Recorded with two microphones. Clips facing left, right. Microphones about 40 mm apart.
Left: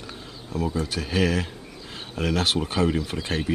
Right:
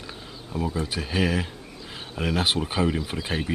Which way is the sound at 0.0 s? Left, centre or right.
Centre.